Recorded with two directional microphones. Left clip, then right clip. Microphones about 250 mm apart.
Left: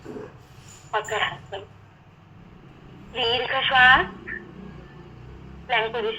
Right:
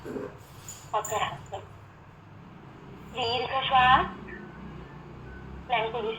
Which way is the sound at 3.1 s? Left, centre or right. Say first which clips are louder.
Left 5 dB; left.